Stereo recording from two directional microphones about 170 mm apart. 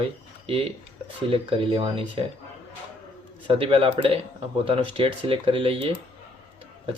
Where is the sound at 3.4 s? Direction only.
30° right (ahead or behind).